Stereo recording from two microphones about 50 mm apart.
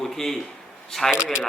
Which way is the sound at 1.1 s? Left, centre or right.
Centre.